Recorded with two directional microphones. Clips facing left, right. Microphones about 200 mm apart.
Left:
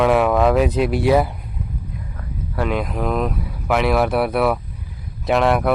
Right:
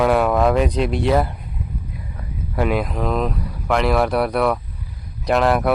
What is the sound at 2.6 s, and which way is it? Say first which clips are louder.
Speech: right 2 dB; 5° right (ahead or behind).